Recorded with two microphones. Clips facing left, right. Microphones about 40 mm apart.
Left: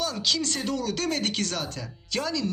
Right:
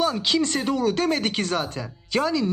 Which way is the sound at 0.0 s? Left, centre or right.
Right.